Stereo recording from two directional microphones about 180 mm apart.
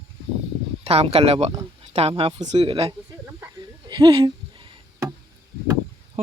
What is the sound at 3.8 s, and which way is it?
Music, 25° right (ahead or behind).